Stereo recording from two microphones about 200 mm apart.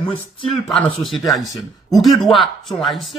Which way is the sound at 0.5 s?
Centre (ahead or behind).